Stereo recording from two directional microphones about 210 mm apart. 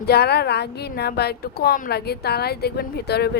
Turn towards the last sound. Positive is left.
turn(degrees=50)  # may be behind; listen again after turning